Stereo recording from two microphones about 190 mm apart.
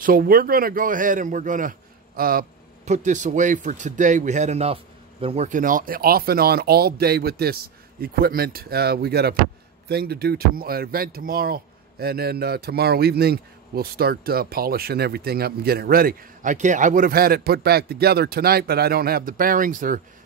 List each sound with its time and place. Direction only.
0.0 s speech: 50° right (ahead or behind)